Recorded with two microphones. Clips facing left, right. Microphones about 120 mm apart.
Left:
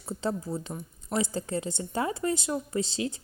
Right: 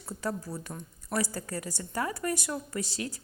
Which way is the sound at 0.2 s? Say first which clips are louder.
Left 3 dB; 25° left (ahead or behind).